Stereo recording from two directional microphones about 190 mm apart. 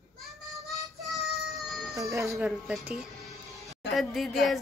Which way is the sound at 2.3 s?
5° right (ahead or behind).